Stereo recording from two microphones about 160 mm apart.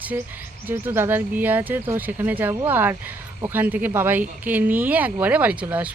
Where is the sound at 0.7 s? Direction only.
15° right (ahead or behind).